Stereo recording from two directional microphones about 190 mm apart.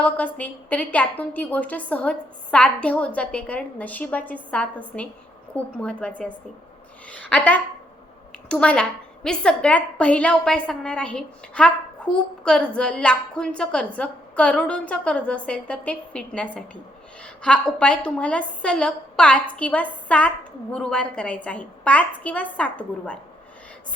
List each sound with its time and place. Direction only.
0.0 s a woman's voice: 10° left (ahead or behind)